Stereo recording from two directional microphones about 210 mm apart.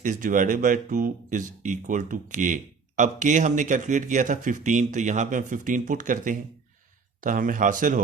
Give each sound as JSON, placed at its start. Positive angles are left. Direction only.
{"t": 0.0, "sound": "speech", "side_deg": -40}